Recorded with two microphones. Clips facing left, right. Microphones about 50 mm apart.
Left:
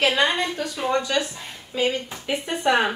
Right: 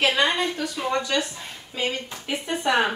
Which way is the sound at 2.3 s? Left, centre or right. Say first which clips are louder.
Left 2 dB; centre.